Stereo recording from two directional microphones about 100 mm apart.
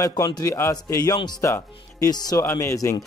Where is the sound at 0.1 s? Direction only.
40° left (ahead or behind).